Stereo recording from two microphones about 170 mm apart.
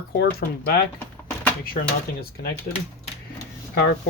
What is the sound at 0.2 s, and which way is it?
Speech, 65° left (ahead or behind).